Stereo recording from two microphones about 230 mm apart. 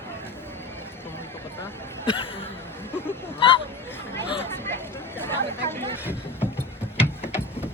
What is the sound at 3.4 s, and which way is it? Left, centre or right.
Hubbub, left.